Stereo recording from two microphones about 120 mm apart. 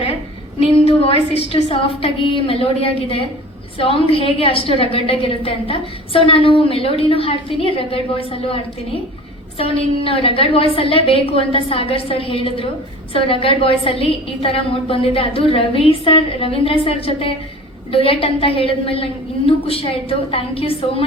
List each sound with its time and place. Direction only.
0.6 s a woman's voice: 50° left (ahead or behind)